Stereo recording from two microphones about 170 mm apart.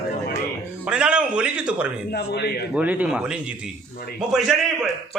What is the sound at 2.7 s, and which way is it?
Speech, 10° right (ahead or behind).